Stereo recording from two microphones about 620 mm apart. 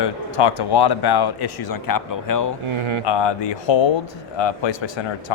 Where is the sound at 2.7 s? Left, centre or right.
Right.